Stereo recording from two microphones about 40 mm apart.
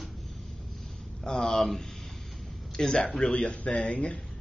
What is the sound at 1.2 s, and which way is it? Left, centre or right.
Speech, centre.